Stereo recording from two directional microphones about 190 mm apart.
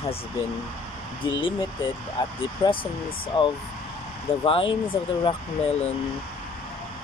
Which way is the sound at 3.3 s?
30° left (ahead or behind).